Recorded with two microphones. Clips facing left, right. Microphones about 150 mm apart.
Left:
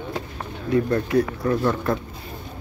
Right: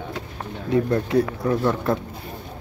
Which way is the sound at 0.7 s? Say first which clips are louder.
Even; 20° right (ahead or behind).